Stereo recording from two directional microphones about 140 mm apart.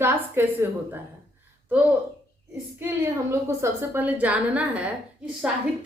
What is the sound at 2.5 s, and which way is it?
A woman's voice, 15° right (ahead or behind).